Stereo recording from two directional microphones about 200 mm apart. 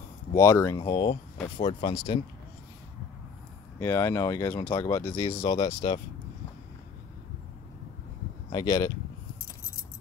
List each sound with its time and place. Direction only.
0.3 s speech: 15° left (ahead or behind)
3.8 s speech: 15° left (ahead or behind); by 5.9 s 30° left (ahead or behind)
8.5 s speech: 20° left (ahead or behind)